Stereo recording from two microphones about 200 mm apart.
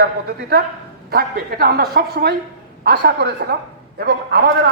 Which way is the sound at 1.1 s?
45° right (ahead or behind).